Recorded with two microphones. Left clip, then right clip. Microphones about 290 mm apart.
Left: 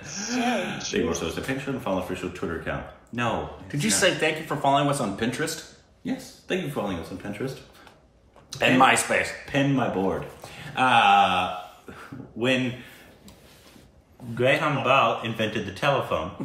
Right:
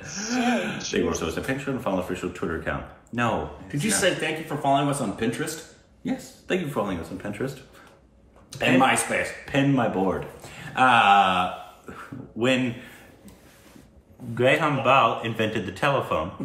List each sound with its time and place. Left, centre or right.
0.0 s speech: centre
6.0 s speech: centre
8.5 s speech: centre
9.5 s speech: centre
14.3 s speech: centre